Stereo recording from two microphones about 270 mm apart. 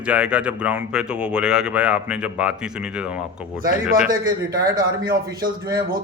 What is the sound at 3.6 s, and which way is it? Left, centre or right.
Speech, right.